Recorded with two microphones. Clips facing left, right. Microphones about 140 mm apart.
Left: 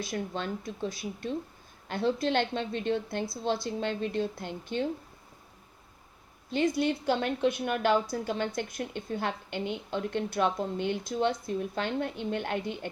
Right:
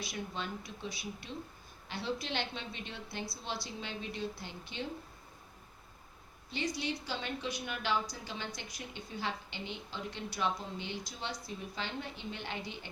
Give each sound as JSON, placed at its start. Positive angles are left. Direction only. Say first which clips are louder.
{"t": 0.0, "sound": "a woman's voice", "louder": "left 7 dB", "side_deg": 50}
{"t": 6.5, "sound": "a woman's voice", "louder": "left 10 dB", "side_deg": 50}